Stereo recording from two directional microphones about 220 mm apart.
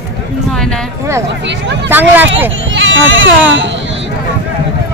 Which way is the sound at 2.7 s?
60° right (ahead or behind).